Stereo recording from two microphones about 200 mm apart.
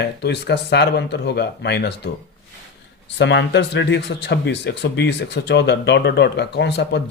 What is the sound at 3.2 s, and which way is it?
Speech, 60° left (ahead or behind).